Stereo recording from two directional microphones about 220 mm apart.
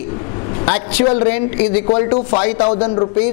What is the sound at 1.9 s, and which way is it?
A man's voice, 25° left (ahead or behind).